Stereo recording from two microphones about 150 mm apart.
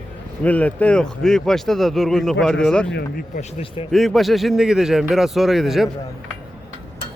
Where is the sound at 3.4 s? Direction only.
45° left (ahead or behind).